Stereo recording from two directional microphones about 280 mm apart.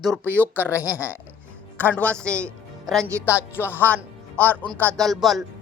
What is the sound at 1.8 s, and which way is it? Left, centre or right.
A man's voice, centre.